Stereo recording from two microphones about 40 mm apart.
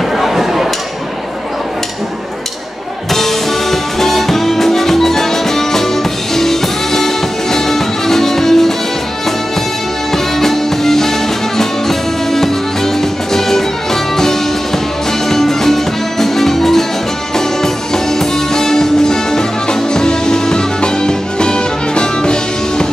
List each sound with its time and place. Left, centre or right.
0.2 s a sound: centre
3.1 s music: centre
10.1 s music: centre
15.2 s music: centre